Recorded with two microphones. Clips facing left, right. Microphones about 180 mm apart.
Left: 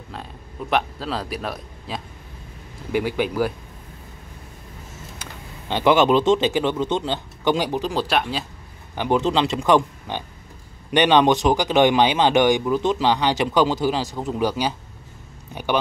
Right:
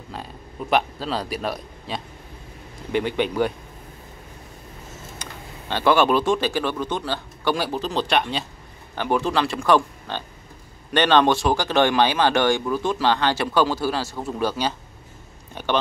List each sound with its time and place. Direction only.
0.1 s a man's voice: centre (ahead or behind)
5.2 s speech: 15° left (ahead or behind)
8.9 s speech: 20° left (ahead or behind)